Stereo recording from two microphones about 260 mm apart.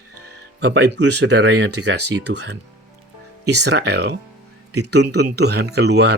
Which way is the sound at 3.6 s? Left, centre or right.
Right.